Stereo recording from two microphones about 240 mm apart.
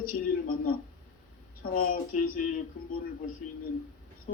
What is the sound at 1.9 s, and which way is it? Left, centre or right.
Speech, left.